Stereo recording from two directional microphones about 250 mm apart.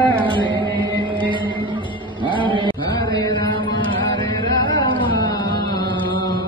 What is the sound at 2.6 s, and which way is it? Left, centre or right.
Chant, centre.